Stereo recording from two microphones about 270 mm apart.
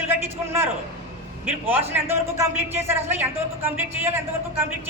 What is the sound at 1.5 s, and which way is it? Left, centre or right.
A man's voice, centre.